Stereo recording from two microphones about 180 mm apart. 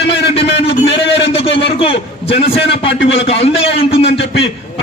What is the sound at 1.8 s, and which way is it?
A man's voice, 30° left (ahead or behind).